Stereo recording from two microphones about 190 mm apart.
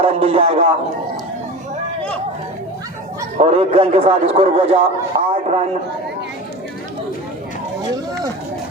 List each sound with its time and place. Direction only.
0.0 s a man's voice: 30° right (ahead or behind)
3.3 s a man's voice: 35° right (ahead or behind)